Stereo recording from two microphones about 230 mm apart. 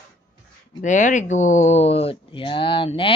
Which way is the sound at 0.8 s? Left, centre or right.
Left.